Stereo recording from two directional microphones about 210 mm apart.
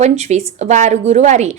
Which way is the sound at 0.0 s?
30° right (ahead or behind).